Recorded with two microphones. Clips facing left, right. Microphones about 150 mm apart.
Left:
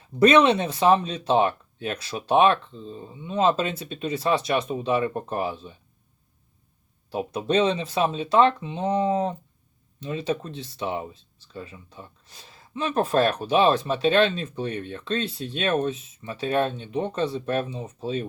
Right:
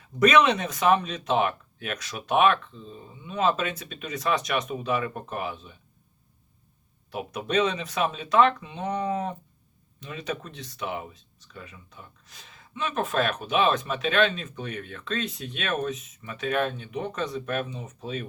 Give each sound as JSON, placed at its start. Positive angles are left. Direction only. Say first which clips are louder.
{"t": 0.2, "sound": "speech", "louder": "left 3 dB", "side_deg": 30}
{"t": 7.1, "sound": "speech", "louder": "left 4 dB", "side_deg": 30}